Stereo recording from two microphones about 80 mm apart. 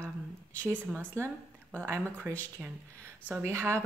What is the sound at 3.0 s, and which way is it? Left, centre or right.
Speech, right.